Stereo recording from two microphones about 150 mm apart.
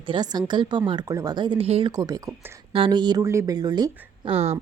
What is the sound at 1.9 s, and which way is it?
Speech, 25° right (ahead or behind).